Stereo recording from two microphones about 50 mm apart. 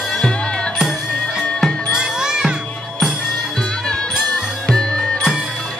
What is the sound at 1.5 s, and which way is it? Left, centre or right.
Music, centre.